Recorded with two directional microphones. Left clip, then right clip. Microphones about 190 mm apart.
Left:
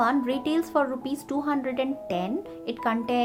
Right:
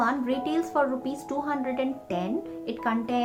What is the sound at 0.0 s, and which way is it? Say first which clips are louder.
A woman's voice: left 2 dB; 35° left (ahead or behind).